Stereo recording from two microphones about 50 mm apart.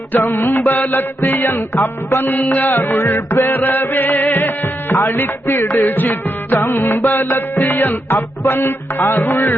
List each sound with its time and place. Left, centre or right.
0.1 s music: left
2.2 s music: left
2.9 s music: left
8.1 s music: left
8.6 s music: left